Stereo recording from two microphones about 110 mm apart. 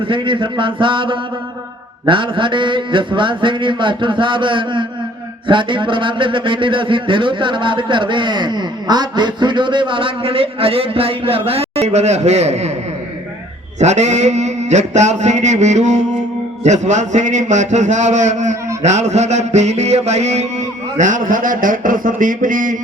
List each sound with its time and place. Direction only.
0.0 s speech: 50° right (ahead or behind); by 12.7 s 80° right
13.7 s music: 90° right